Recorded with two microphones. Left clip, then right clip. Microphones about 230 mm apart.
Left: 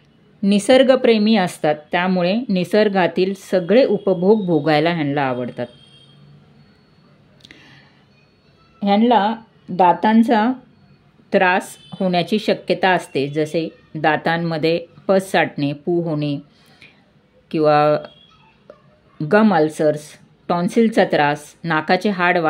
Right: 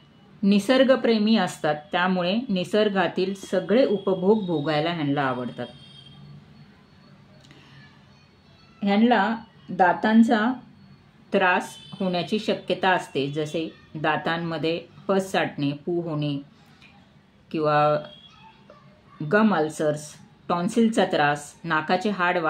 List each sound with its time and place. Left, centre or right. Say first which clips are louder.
0.4 s speech: left 7 dB; left
8.7 s a woman's voice: left 6 dB; left
17.5 s speech: left 6 dB; left
19.2 s speech: left 7 dB; left